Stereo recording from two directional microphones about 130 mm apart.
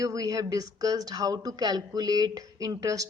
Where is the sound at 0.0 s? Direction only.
25° right (ahead or behind).